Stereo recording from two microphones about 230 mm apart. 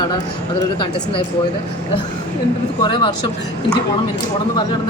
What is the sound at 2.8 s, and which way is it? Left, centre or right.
Speech, left.